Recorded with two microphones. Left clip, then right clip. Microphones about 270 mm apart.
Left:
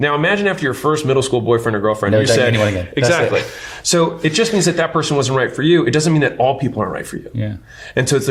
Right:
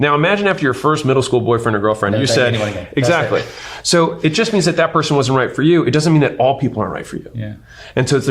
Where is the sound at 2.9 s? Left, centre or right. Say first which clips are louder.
Even; right.